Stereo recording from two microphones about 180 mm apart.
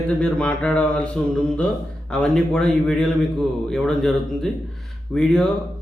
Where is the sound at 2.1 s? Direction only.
5° left (ahead or behind).